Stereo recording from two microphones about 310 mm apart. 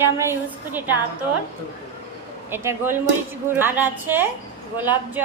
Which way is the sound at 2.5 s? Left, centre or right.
Centre.